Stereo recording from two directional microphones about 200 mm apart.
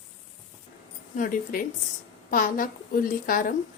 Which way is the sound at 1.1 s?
40° left (ahead or behind).